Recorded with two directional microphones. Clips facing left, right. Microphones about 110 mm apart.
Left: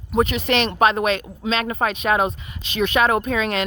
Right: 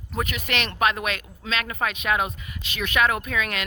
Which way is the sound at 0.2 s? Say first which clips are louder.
Left 9 dB; 30° left (ahead or behind).